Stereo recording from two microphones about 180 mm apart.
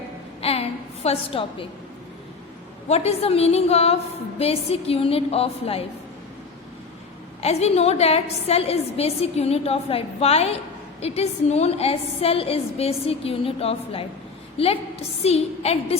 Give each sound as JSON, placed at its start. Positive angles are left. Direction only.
{"t": 0.4, "sound": "a sound", "side_deg": 35}
{"t": 1.0, "sound": "a woman's voice", "side_deg": 30}
{"t": 2.9, "sound": "a woman's voice", "side_deg": 35}
{"t": 7.4, "sound": "a woman's voice", "side_deg": 35}